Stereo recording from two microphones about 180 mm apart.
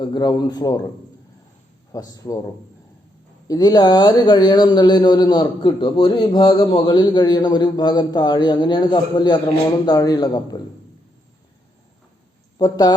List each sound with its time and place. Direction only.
0.0 s a man's voice: 25° left (ahead or behind)
1.9 s a man's voice: 20° left (ahead or behind)
3.4 s a man's voice: 20° left (ahead or behind)
12.5 s speech: 20° left (ahead or behind)